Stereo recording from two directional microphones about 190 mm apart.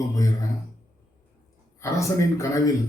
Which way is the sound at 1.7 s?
15° left (ahead or behind).